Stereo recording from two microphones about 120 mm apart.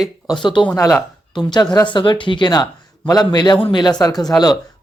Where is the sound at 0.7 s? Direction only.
25° left (ahead or behind).